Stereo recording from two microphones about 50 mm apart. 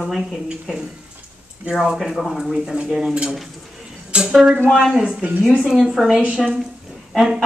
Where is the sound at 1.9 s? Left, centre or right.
Centre.